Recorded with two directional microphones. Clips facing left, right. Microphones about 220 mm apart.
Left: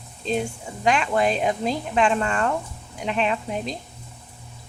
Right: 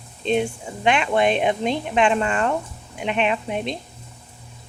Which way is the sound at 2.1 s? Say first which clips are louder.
Right 2 dB; 20° right (ahead or behind).